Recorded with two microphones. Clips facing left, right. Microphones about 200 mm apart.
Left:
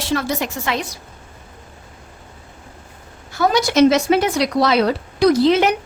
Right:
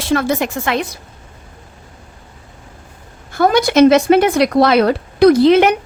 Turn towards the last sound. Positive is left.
turn(degrees=-60)  # may be behind; listen again after turning